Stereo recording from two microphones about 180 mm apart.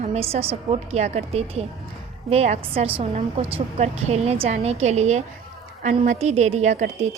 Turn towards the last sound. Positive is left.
turn(degrees=-40)  # may be behind; listen again after turning